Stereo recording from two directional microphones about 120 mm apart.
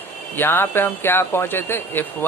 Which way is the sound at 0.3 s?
20° left (ahead or behind).